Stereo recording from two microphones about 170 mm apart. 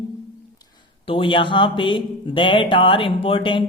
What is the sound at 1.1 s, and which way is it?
Speech, 30° left (ahead or behind).